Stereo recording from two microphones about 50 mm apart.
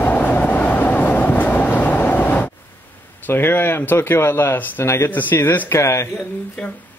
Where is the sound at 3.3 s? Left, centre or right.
Left.